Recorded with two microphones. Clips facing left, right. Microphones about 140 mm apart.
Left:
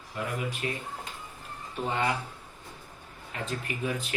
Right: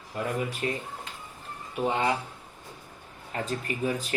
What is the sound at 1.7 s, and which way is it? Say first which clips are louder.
Speech: right 3 dB; 15° right (ahead or behind).